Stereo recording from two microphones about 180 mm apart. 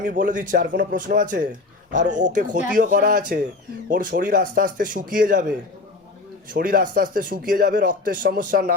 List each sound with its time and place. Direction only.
0.0 s speech: 45° right (ahead or behind)